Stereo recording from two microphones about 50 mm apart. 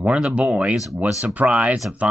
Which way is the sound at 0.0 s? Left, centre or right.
Right.